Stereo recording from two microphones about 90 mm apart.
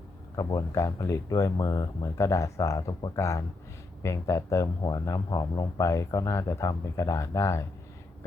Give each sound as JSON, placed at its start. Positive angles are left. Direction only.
{"t": 0.4, "sound": "a man's voice", "side_deg": 35}
{"t": 4.8, "sound": "speech", "side_deg": 50}
{"t": 5.0, "sound": "a man's voice", "side_deg": 40}